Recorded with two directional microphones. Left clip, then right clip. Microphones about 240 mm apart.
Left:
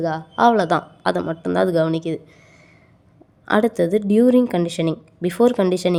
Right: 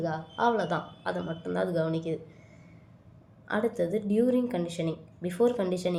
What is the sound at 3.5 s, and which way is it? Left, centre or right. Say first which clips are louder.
A woman's voice: left 11 dB; left.